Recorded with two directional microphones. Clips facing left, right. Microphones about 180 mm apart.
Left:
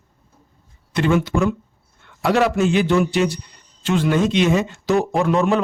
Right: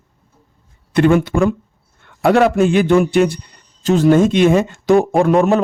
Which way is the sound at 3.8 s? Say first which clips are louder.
Right 7 dB; 40° right (ahead or behind).